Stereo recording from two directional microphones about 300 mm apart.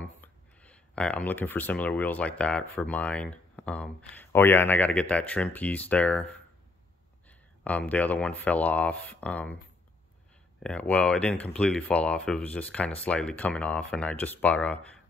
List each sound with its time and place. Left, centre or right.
0.0 s speech: centre
10.6 s speech: centre